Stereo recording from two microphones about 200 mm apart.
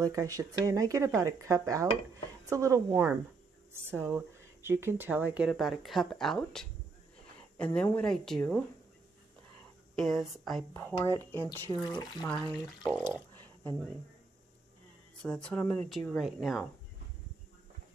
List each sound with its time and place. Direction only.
0.0 s speech: 15° right (ahead or behind); by 8.6 s 5° left (ahead or behind)
9.9 s speech: centre (ahead or behind); by 12.3 s 20° left (ahead or behind)
12.3 s speech: 5° left (ahead or behind)
13.3 s a sound: 10° left (ahead or behind)
15.2 s speech: 5° left (ahead or behind)